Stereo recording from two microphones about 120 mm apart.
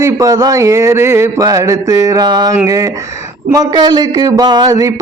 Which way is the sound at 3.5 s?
35° right (ahead or behind).